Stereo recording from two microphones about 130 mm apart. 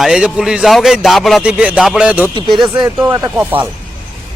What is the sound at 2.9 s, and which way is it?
Speech, 15° right (ahead or behind).